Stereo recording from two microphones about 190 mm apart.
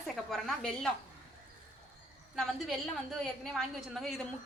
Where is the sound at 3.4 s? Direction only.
Centre (ahead or behind).